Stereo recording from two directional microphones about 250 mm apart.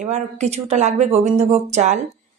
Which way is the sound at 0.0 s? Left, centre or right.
Right.